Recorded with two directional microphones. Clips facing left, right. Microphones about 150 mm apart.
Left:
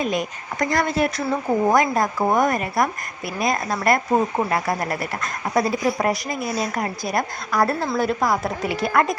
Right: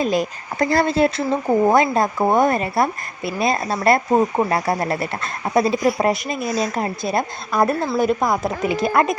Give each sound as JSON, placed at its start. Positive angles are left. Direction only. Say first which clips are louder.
{"t": 0.0, "sound": "speech", "louder": "right 4 dB", "side_deg": -30}